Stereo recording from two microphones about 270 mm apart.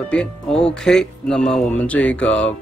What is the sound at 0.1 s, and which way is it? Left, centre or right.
Speech, centre.